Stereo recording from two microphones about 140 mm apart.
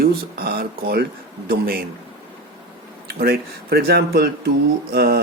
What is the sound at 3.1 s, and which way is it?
Speech, 90° right.